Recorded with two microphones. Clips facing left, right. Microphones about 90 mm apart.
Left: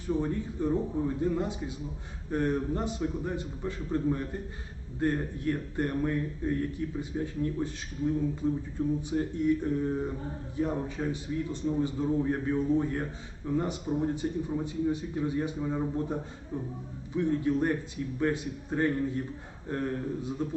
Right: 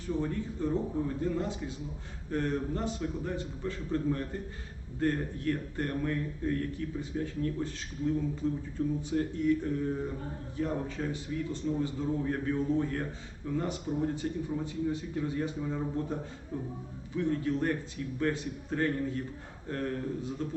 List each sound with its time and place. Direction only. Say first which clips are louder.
0.1 s a man's voice: left 3 dB; 15° left (ahead or behind)
10.6 s speech: left 2 dB; 15° left (ahead or behind)
17.2 s a man's voice: left 3 dB; 20° left (ahead or behind)